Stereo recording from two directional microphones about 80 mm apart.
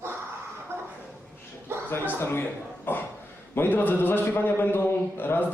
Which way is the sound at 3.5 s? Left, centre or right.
Left.